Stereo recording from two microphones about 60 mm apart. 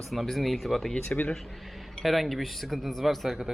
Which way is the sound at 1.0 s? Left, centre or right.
Left.